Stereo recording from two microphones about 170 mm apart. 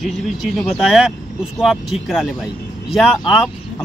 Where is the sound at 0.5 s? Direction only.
Centre (ahead or behind).